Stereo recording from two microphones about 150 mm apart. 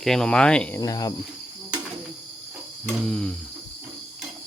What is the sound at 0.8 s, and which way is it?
Cricket, 25° left (ahead or behind).